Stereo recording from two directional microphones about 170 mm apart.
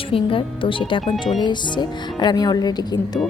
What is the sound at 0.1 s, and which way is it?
A woman's voice, 30° left (ahead or behind).